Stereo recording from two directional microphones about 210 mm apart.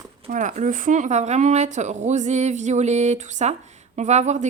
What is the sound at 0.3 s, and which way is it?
Speech, 35° right (ahead or behind).